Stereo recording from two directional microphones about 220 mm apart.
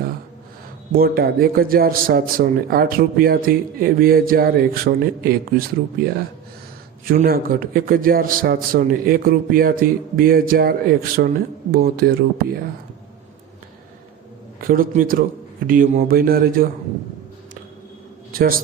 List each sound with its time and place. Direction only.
0.9 s a man's voice: 45° right (ahead or behind)
14.6 s a man's voice: 40° right (ahead or behind)
18.3 s a man's voice: 40° right (ahead or behind)